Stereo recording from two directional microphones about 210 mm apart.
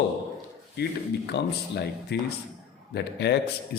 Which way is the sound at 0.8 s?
50° left (ahead or behind).